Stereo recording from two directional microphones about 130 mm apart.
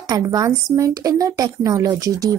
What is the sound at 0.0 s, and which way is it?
A woman's voice, 30° right (ahead or behind).